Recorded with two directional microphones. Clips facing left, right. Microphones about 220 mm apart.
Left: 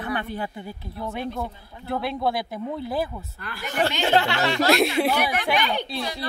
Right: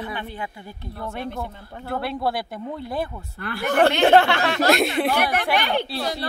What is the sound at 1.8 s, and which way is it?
Speech, centre (ahead or behind).